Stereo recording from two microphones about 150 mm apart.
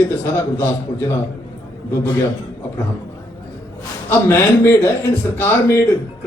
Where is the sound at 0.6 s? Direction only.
15° left (ahead or behind).